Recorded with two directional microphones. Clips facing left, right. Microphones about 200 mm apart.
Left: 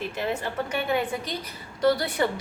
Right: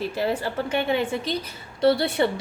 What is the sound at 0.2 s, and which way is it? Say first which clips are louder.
A woman's voice: right 3 dB; 35° right (ahead or behind).